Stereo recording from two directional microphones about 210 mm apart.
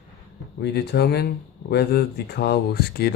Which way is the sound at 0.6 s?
50° left (ahead or behind).